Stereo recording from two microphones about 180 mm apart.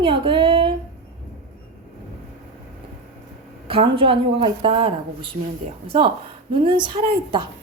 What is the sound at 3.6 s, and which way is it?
A woman's voice, 30° right (ahead or behind).